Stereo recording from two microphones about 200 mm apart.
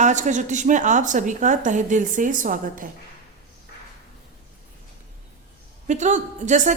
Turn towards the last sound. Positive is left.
turn(degrees=-40)  # may be behind; listen again after turning